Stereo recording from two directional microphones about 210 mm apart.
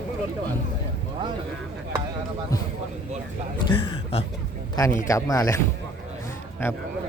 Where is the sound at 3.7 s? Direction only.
25° left (ahead or behind).